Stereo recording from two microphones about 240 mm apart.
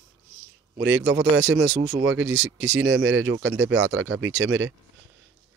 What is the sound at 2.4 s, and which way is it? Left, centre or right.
Speech, centre.